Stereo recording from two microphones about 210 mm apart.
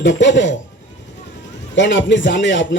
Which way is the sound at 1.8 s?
60° left (ahead or behind).